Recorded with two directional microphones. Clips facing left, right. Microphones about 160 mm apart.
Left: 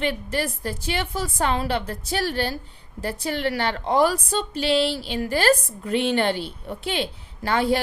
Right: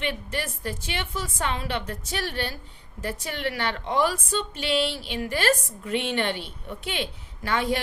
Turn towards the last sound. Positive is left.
turn(degrees=35)  # may be behind; listen again after turning